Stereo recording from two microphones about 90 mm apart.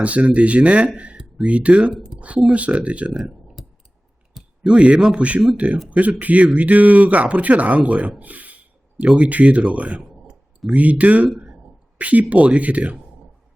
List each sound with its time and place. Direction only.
0.0 s speech: 15° right (ahead or behind)
10.0 s clicking: centre (ahead or behind)
10.8 s speech: 15° right (ahead or behind)
11.3 s a sound: 5° right (ahead or behind)
11.9 s speech: 15° right (ahead or behind)